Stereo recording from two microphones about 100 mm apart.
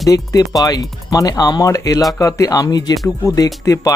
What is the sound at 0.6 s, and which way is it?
Speech, 40° left (ahead or behind).